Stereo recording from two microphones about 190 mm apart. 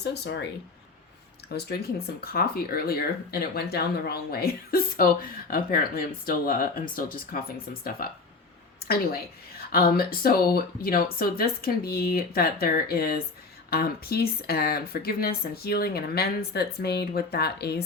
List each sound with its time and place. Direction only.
0.0 s speech: 65° left (ahead or behind)
1.5 s a woman's voice: 55° left (ahead or behind)